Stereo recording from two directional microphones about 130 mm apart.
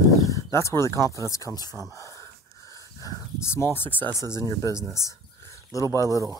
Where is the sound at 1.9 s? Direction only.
25° left (ahead or behind).